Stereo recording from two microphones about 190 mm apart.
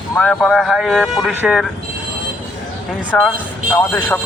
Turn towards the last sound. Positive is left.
turn(degrees=10)  # may be behind; listen again after turning